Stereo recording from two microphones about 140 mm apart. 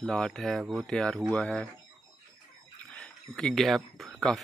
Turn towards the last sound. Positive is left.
turn(degrees=0)  # may be behind; listen again after turning